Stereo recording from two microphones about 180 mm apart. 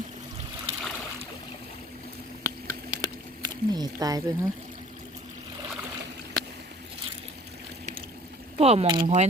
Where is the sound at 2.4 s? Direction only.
20° right (ahead or behind).